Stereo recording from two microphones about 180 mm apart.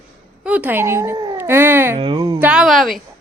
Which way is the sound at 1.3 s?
10° right (ahead or behind).